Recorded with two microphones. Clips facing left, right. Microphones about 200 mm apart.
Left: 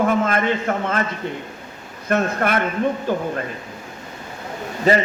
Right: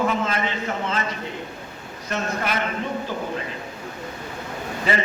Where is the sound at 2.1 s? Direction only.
55° left (ahead or behind).